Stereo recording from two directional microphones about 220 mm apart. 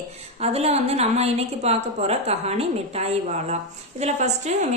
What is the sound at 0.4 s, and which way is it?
A woman's voice, 30° right (ahead or behind).